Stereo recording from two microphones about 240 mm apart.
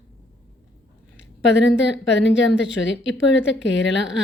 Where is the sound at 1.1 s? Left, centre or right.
Left.